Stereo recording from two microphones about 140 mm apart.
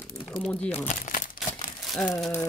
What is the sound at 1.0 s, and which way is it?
Crumpling, 70° left (ahead or behind).